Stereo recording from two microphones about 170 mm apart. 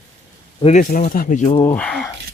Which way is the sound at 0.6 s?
50° left (ahead or behind).